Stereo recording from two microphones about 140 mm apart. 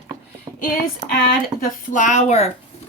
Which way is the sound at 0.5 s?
20° right (ahead or behind).